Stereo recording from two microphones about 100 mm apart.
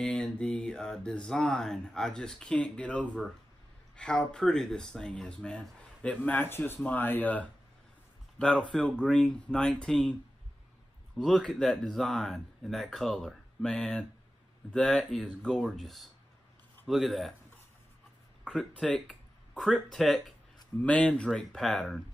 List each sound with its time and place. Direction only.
0.0 s music: 10° left (ahead or behind)
11.1 s speech: 5° left (ahead or behind)
18.4 s speech: 5° left (ahead or behind)